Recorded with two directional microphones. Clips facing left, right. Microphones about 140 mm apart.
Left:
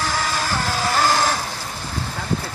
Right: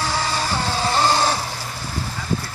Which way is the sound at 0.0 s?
20° right (ahead or behind).